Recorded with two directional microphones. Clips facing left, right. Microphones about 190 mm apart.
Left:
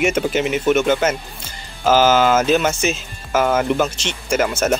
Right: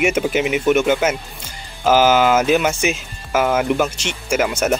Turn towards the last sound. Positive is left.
turn(degrees=-10)  # may be behind; listen again after turning